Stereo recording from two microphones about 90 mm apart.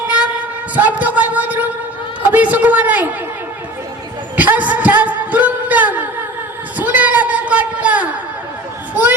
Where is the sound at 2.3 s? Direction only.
15° right (ahead or behind).